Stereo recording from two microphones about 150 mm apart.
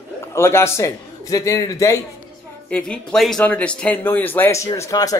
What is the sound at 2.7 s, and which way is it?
A man's voice, 5° left (ahead or behind).